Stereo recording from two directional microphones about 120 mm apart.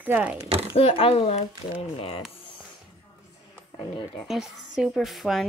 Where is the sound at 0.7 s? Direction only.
55° left (ahead or behind).